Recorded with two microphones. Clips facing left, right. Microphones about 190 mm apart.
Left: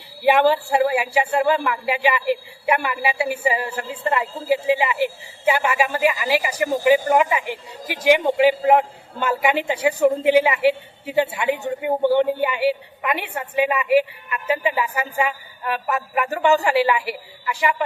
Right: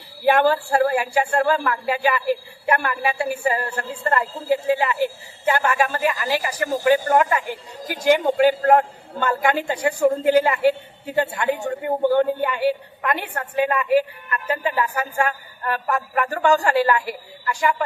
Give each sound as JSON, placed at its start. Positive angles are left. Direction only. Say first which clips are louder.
{"t": 0.3, "sound": "a woman's voice", "louder": "left 1 dB", "side_deg": 5}